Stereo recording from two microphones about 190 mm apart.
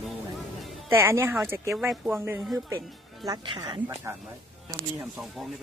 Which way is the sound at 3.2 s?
25° right (ahead or behind).